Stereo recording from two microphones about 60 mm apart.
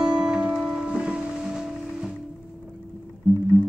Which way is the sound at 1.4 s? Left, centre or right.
Centre.